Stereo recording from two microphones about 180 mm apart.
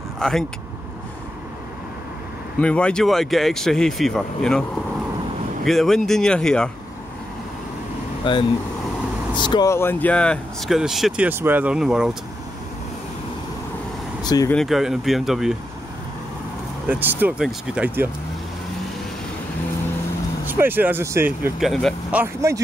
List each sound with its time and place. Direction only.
0.2 s speech: 5° left (ahead or behind)
2.6 s speech: 5° left (ahead or behind)
5.7 s speech: centre (ahead or behind)
8.2 s speech: 25° left (ahead or behind); by 12.2 s 5° right (ahead or behind)
14.2 s speech: 20° left (ahead or behind)
14.5 s speech: centre (ahead or behind)
16.8 s speech: 10° right (ahead or behind)
20.4 s speech: 10° right (ahead or behind)
21.5 s speech: centre (ahead or behind)
22.2 s speech: 15° right (ahead or behind)